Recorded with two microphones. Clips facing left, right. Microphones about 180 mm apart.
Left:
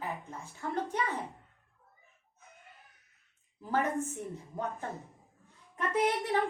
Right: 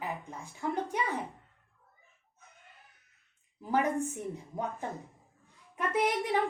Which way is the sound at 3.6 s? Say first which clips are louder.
Right 2 dB; 15° right (ahead or behind).